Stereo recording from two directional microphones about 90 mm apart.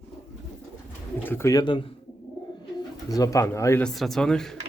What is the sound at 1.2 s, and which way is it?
Speech, 20° left (ahead or behind).